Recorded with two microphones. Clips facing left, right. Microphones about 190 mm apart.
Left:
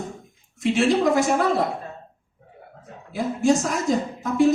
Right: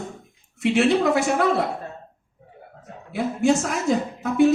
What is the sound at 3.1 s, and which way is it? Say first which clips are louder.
Speech: even; 65° right (ahead or behind).